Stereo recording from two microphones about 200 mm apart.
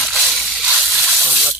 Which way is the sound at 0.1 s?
Centre (ahead or behind).